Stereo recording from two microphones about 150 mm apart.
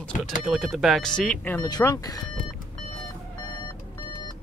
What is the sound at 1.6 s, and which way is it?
Speech, 25° left (ahead or behind).